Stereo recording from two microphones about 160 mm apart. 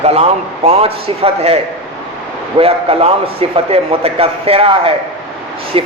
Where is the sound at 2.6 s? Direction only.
35° right (ahead or behind).